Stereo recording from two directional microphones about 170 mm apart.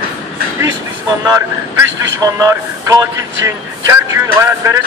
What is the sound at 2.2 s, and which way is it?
Speech, 20° right (ahead or behind).